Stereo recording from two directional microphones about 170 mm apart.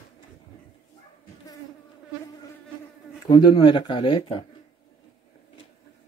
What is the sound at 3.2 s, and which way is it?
Speech, 25° left (ahead or behind).